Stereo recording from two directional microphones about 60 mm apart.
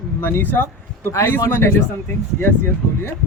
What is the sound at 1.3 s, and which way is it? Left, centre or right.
Speech, left.